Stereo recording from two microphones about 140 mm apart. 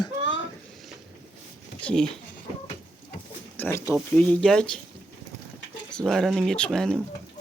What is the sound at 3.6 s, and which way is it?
Speech, 20° left (ahead or behind).